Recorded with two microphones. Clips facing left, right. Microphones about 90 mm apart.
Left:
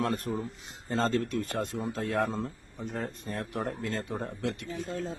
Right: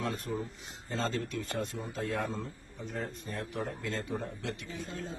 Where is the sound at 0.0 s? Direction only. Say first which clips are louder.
Left 4 dB; 55° left (ahead or behind).